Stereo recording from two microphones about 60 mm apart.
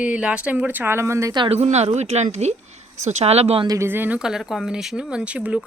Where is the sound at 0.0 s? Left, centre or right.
Centre; by 0.9 s right.